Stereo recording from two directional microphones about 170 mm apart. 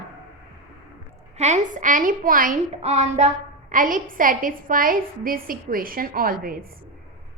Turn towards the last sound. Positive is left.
turn(degrees=-60)  # may be behind; listen again after turning